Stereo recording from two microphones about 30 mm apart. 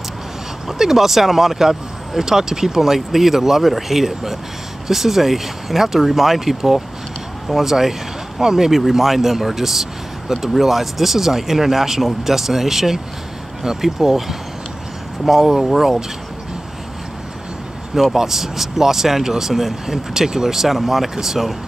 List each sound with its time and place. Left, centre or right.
0.7 s speech: centre
18.1 s speech: centre